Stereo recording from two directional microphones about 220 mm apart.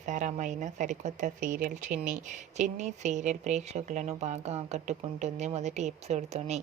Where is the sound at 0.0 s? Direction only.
35° right (ahead or behind).